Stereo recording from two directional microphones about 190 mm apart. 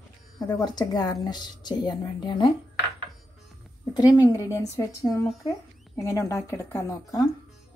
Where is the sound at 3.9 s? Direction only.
20° left (ahead or behind).